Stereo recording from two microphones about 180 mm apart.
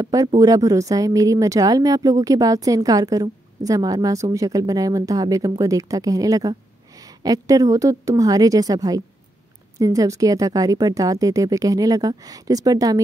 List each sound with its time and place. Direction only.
0.0 s a woman's voice: 20° right (ahead or behind)